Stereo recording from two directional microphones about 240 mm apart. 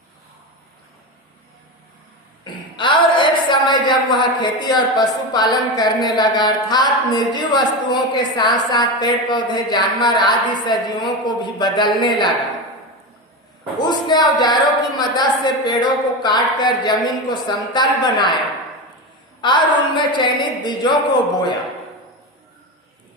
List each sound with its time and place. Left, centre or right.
2.4 s a woman's voice: centre
13.7 s a woman's voice: centre
19.4 s a woman's voice: centre